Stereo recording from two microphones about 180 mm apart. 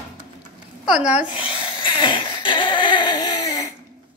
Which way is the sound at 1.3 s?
30° left (ahead or behind).